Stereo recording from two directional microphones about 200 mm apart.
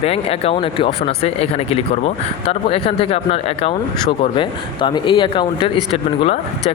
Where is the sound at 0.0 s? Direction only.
30° left (ahead or behind).